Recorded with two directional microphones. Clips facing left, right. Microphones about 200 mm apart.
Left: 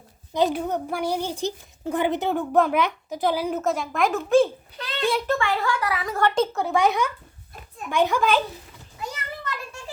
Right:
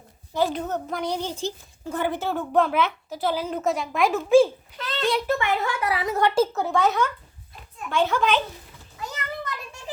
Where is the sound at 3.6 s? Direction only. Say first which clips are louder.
Even; centre (ahead or behind); by 6.2 s 25° right (ahead or behind).